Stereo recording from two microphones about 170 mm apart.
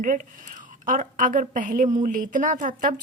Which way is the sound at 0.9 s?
50° right (ahead or behind).